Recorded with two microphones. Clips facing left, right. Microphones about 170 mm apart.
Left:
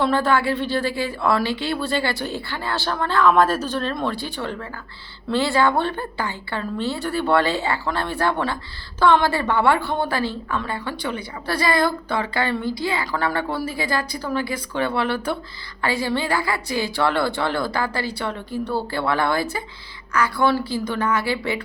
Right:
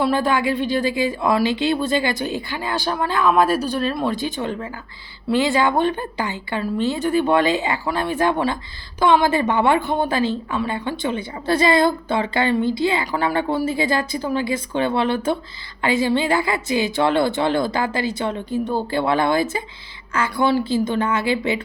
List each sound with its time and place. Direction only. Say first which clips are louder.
0.0 s a woman's voice: right 1 dB; 15° right (ahead or behind)